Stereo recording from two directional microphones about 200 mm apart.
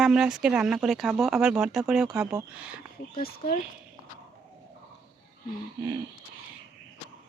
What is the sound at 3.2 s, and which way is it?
Speech, 50° left (ahead or behind).